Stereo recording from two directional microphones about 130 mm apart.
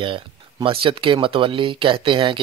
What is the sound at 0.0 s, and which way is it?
Speech, 40° right (ahead or behind).